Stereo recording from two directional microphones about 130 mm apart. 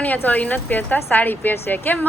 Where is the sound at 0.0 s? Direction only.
10° left (ahead or behind).